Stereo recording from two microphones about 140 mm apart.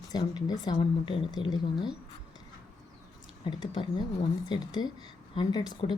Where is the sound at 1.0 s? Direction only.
40° left (ahead or behind).